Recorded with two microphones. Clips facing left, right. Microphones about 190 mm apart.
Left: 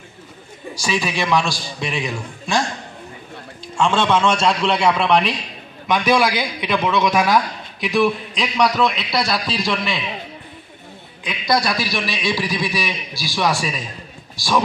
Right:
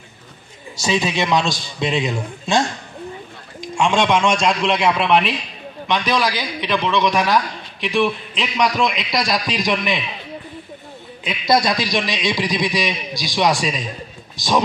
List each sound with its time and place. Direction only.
0.7 s a man's voice: 25° right (ahead or behind)
3.6 s a man's voice: 15° right (ahead or behind)
5.9 s a man's voice: 10° left (ahead or behind)
8.7 s a man's voice: 15° right (ahead or behind)
11.2 s a man's voice: 25° right (ahead or behind)